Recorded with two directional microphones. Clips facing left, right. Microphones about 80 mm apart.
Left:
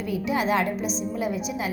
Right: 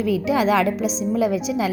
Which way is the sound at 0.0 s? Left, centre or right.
Right.